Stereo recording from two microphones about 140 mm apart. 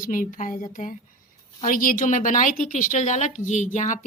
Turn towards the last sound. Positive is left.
turn(degrees=60)  # may be behind; listen again after turning